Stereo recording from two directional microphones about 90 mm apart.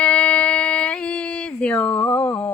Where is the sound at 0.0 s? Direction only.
15° left (ahead or behind).